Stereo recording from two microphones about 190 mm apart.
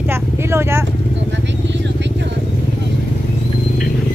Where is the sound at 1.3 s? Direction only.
70° right (ahead or behind).